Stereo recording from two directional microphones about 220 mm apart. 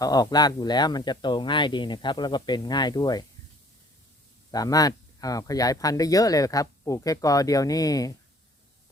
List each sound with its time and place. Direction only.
0.0 s speech: 15° left (ahead or behind)
4.5 s speech: 15° left (ahead or behind)